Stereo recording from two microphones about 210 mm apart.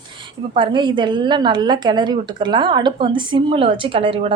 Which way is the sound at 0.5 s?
20° right (ahead or behind).